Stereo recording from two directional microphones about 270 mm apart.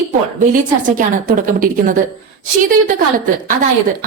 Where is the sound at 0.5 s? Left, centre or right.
Right.